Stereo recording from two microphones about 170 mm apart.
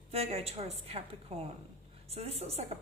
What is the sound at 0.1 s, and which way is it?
A woman's voice, 35° right (ahead or behind).